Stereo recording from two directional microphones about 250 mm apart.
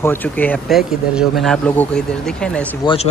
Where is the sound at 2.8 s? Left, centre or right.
Centre.